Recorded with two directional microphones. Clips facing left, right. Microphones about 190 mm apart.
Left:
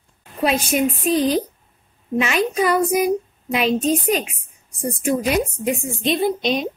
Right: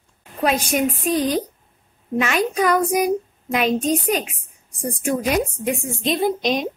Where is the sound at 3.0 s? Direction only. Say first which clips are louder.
Left 1 dB; 45° right (ahead or behind).